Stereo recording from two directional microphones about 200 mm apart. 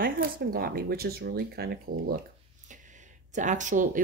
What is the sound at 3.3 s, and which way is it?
Speech, 40° right (ahead or behind).